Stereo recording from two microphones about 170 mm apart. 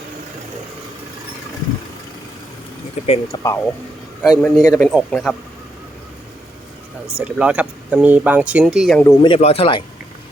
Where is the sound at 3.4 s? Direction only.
20° left (ahead or behind).